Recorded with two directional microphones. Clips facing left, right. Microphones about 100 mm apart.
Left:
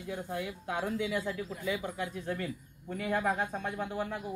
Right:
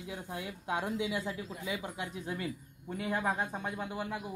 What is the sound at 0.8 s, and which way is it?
Speech, 15° right (ahead or behind).